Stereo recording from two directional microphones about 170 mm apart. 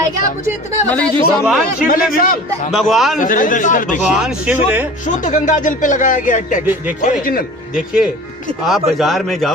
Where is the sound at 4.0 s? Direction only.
5° right (ahead or behind).